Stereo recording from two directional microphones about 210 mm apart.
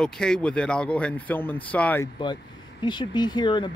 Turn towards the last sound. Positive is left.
turn(degrees=20)  # may be behind; listen again after turning